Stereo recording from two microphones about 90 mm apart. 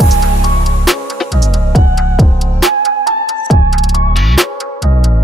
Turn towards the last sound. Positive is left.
turn(degrees=0)  # may be behind; listen again after turning